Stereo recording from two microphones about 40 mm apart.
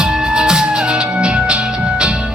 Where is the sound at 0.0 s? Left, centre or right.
Centre.